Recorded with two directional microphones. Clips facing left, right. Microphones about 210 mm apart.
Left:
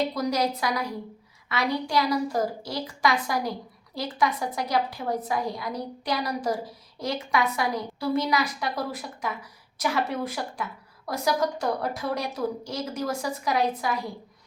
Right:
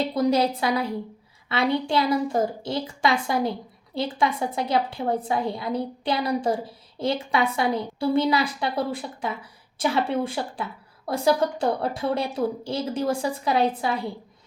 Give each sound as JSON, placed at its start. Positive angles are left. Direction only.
{"t": 0.1, "sound": "a woman's voice", "side_deg": -30}